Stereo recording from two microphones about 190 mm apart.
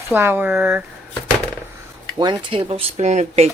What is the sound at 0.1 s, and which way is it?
Speech, 10° right (ahead or behind).